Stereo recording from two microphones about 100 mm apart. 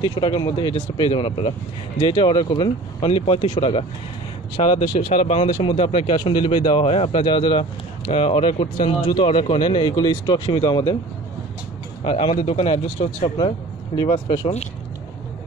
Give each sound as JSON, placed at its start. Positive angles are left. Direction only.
{"t": 0.0, "sound": "speech", "side_deg": 50}
{"t": 4.6, "sound": "speech", "side_deg": 75}
{"t": 8.1, "sound": "speech", "side_deg": 75}
{"t": 12.0, "sound": "speech", "side_deg": 70}
{"t": 13.9, "sound": "speech", "side_deg": 50}